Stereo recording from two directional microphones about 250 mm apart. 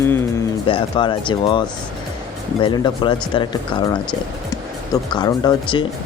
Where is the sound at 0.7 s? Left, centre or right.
Centre.